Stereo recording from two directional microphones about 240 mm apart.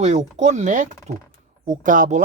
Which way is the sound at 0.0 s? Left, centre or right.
Right.